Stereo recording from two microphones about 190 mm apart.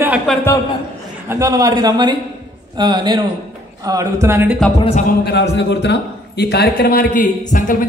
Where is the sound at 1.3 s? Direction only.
20° right (ahead or behind).